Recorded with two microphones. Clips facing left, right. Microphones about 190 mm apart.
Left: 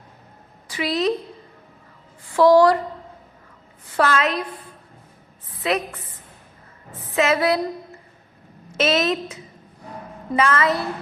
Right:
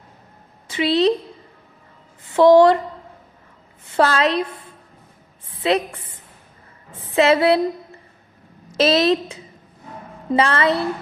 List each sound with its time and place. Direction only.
0.7 s a woman's voice: 25° right (ahead or behind)
2.2 s a woman's voice: 20° right (ahead or behind)
3.8 s a woman's voice: 30° right (ahead or behind)
5.5 s a woman's voice: 30° right (ahead or behind)
7.2 s a woman's voice: 30° right (ahead or behind)
8.7 s a woman's voice: 35° right (ahead or behind)